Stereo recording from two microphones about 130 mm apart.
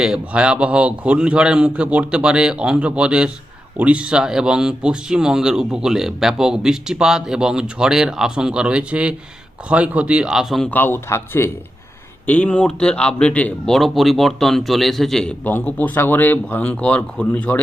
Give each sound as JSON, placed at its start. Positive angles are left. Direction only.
{"t": 0.0, "sound": "a man's voice", "side_deg": -5}
{"t": 10.7, "sound": "speech", "side_deg": 15}